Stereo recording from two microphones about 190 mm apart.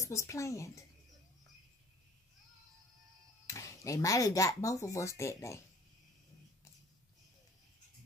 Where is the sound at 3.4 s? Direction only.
15° left (ahead or behind).